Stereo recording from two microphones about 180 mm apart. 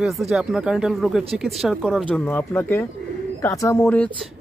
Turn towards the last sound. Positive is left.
turn(degrees=5)  # may be behind; listen again after turning